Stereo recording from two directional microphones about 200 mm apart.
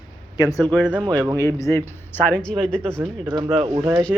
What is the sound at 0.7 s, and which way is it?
Speech, 5° right (ahead or behind).